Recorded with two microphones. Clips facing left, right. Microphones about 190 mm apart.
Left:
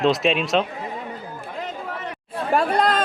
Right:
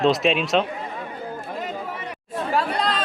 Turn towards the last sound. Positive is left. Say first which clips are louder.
# left 4 dB
turn(degrees=50)  # may be behind; listen again after turning